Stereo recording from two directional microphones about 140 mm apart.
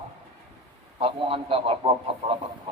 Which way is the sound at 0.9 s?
40° right (ahead or behind).